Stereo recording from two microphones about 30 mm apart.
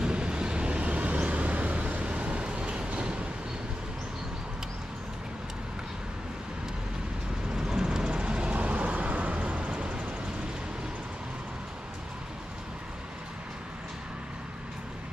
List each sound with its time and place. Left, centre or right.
0.0 s vehicle: right
0.8 s vehicle: right
7.5 s vehicle: centre
8.1 s vehicle: right
9.7 s vehicle: right